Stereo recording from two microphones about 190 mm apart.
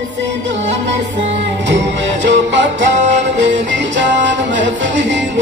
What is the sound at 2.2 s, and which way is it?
Music, 70° right (ahead or behind).